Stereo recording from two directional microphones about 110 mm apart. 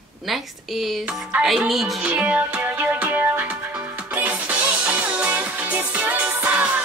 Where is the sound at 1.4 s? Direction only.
5° right (ahead or behind).